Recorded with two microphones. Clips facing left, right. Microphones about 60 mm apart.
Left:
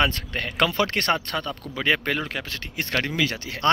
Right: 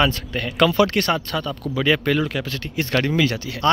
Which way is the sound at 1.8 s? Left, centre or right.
Left.